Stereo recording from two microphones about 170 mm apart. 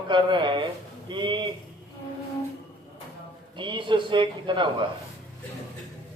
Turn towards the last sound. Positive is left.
turn(degrees=-30)  # may be behind; listen again after turning